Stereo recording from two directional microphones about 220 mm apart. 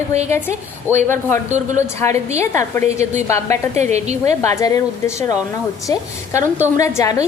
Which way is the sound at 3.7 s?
30° right (ahead or behind).